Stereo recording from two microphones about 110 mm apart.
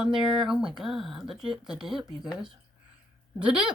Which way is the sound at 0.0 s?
5° right (ahead or behind).